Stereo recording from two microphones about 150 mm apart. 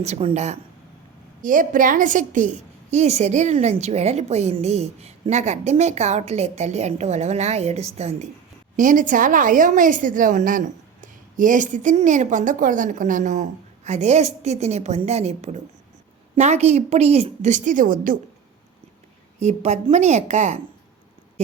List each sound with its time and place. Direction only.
0.0 s a woman's voice: 45° right (ahead or behind)
1.4 s a woman's voice: 60° right (ahead or behind)
2.9 s a woman's voice: 50° right (ahead or behind)
8.7 s a woman's voice: 60° right (ahead or behind)
19.4 s a woman's voice: 50° right (ahead or behind)